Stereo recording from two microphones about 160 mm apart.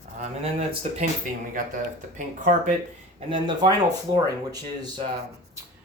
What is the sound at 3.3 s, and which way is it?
Speech, 30° right (ahead or behind).